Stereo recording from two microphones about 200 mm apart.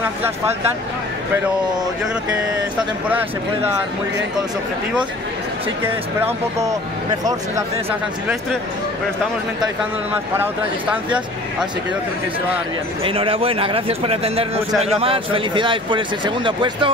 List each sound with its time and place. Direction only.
3.1 s speech: 10° right (ahead or behind)
6.2 s speech: 15° right (ahead or behind)
10.1 s speech: 10° right (ahead or behind)
13.0 s speech: 25° right (ahead or behind)